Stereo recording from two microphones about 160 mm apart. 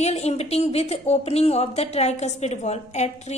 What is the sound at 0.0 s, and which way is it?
A woman's voice, 45° left (ahead or behind).